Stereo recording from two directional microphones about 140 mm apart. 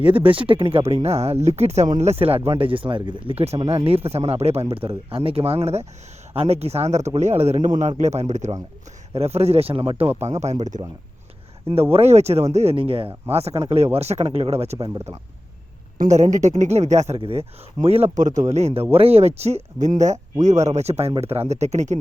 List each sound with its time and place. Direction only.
0.0 s a man's voice: 40° right (ahead or behind)
10.4 s a man's voice: 55° right (ahead or behind)
16.0 s a man's voice: 60° right (ahead or behind)
17.2 s speech: 40° right (ahead or behind)